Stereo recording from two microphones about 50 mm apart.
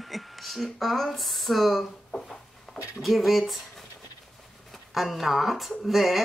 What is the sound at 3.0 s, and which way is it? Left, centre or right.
Speech, centre.